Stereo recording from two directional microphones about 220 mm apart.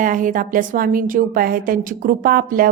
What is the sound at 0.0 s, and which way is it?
A woman's voice, 35° right (ahead or behind).